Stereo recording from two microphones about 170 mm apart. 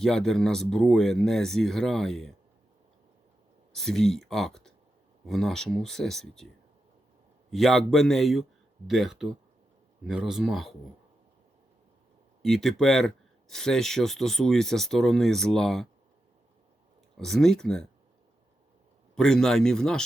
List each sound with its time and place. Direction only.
0.0 s speech: 5° left (ahead or behind)
3.7 s speech: centre (ahead or behind)
7.5 s speech: centre (ahead or behind)
12.4 s speech: centre (ahead or behind)
17.2 s speech: centre (ahead or behind)
19.1 s speech: 5° left (ahead or behind)